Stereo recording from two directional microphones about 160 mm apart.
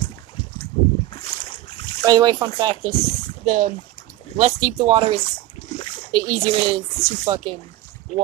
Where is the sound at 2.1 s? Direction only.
25° right (ahead or behind).